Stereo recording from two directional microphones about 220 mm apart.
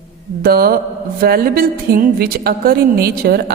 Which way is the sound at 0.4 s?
45° right (ahead or behind).